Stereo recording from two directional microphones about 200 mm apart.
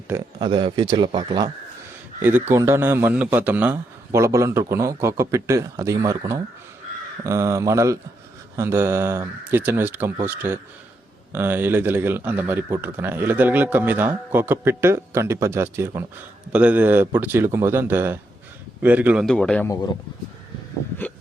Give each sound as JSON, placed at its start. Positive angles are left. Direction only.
{"t": 0.3, "sound": "a man's voice", "side_deg": -25}
{"t": 2.5, "sound": "speech", "side_deg": -15}
{"t": 19.2, "sound": "speech", "side_deg": 5}
{"t": 21.0, "sound": "a sound", "side_deg": 10}